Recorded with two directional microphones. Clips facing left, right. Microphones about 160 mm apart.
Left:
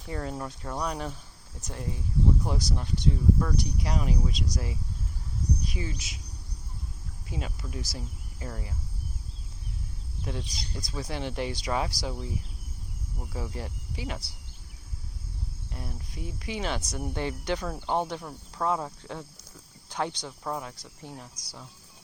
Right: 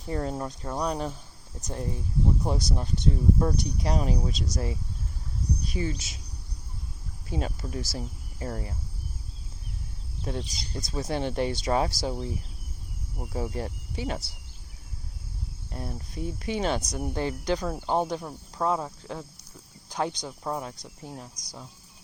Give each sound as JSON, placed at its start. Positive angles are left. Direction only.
{"t": 0.1, "sound": "speech", "side_deg": -30}
{"t": 0.9, "sound": "speech", "side_deg": -25}
{"t": 3.3, "sound": "speech", "side_deg": -30}
{"t": 7.3, "sound": "speech", "side_deg": -35}
{"t": 10.4, "sound": "speech", "side_deg": 0}
{"t": 10.8, "sound": "speech", "side_deg": -25}
{"t": 11.2, "sound": "speech", "side_deg": -40}
{"t": 11.5, "sound": "speech", "side_deg": -30}
{"t": 15.7, "sound": "speech", "side_deg": -35}
{"t": 16.8, "sound": "speech", "side_deg": -15}
{"t": 17.2, "sound": "speech", "side_deg": -35}
{"t": 17.7, "sound": "speech", "side_deg": -10}
{"t": 18.8, "sound": "speech", "side_deg": -5}
{"t": 20.0, "sound": "speech", "side_deg": -15}